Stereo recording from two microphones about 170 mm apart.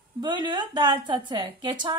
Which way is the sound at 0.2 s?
25° right (ahead or behind).